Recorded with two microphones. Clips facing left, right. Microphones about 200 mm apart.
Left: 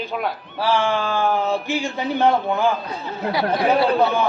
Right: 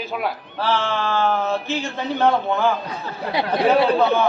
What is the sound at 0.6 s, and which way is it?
A man's voice, 15° left (ahead or behind).